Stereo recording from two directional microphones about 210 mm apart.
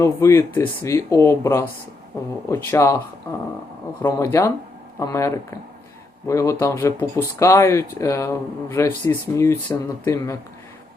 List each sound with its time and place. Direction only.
0.0 s speech: 15° left (ahead or behind)
4.0 s speech: 15° left (ahead or behind)